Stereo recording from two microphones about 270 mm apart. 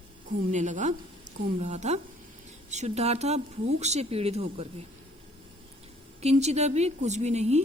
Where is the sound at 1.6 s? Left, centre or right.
Right.